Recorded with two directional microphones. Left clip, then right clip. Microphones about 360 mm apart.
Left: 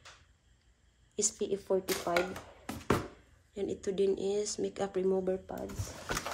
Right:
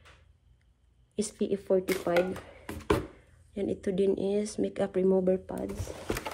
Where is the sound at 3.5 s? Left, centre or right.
Centre.